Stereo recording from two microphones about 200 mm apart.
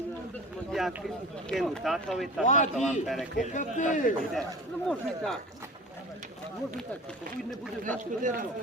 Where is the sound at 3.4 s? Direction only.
40° left (ahead or behind).